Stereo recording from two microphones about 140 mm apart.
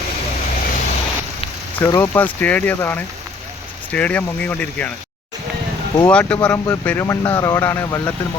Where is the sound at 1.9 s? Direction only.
15° left (ahead or behind).